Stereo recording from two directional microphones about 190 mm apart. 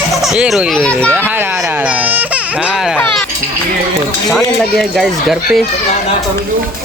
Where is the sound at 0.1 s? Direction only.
Centre (ahead or behind).